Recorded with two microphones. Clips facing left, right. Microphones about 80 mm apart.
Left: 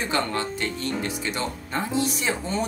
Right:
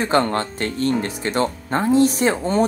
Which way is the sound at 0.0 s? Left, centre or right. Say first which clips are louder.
Right 7 dB; right.